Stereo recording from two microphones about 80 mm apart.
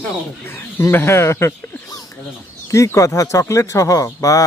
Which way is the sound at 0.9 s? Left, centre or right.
Left.